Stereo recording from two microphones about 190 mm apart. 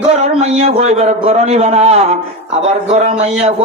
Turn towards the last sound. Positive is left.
turn(degrees=-35)  # may be behind; listen again after turning